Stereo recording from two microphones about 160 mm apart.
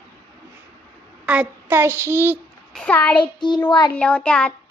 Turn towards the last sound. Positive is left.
turn(degrees=5)  # may be behind; listen again after turning